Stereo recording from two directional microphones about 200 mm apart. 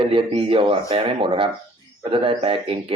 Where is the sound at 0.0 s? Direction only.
25° right (ahead or behind).